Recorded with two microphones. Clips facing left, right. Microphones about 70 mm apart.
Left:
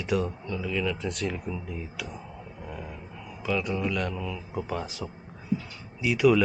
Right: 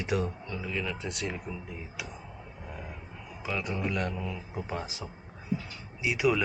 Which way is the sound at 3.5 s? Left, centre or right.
Centre.